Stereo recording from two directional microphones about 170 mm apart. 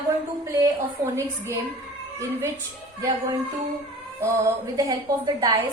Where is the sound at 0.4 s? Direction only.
20° right (ahead or behind).